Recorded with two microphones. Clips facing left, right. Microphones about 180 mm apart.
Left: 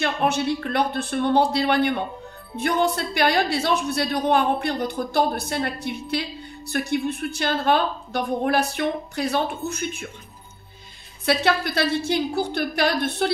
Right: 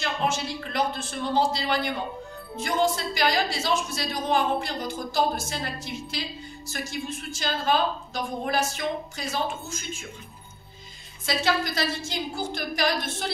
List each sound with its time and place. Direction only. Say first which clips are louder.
0.0 s a woman's voice: left 5 dB; 60° left (ahead or behind)
11.2 s a woman's voice: left 4 dB; 65° left (ahead or behind)